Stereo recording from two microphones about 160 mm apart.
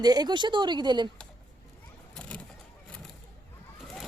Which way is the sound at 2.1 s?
5° left (ahead or behind).